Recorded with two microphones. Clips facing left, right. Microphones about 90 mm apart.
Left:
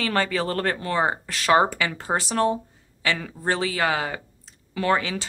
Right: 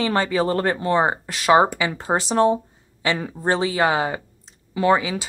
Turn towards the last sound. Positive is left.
turn(degrees=-15)  # may be behind; listen again after turning